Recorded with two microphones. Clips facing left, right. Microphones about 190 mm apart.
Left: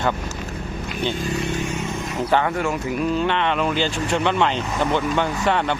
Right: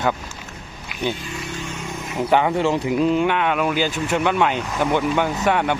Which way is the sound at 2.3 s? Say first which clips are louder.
Right 3 dB; 15° right (ahead or behind).